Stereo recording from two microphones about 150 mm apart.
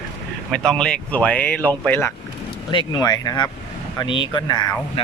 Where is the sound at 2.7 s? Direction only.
25° left (ahead or behind).